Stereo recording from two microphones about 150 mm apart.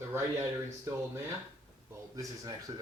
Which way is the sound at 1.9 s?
25° right (ahead or behind).